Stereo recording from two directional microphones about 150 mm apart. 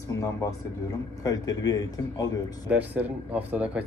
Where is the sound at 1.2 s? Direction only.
25° left (ahead or behind).